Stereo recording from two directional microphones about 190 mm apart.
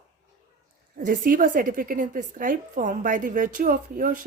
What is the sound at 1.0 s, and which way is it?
A woman's voice, 50° right (ahead or behind).